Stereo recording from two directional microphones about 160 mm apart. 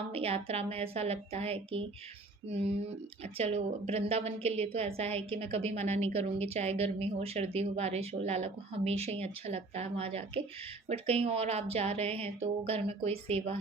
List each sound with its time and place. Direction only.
0.1 s a woman's voice: 40° right (ahead or behind)